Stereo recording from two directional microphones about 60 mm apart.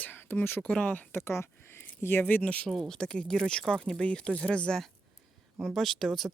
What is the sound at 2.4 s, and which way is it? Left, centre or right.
Speech, centre.